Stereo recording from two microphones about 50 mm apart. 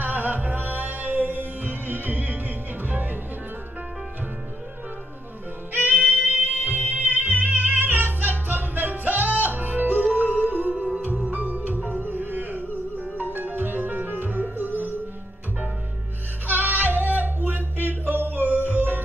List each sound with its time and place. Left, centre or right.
0.0 s music: right
5.9 s music: right
16.4 s music: right